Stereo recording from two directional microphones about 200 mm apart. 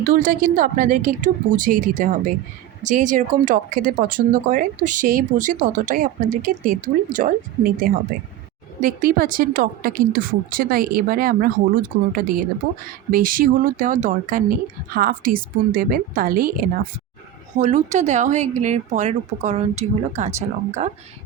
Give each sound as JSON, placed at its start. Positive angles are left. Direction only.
{"t": 0.0, "sound": "a woman's voice", "side_deg": -45}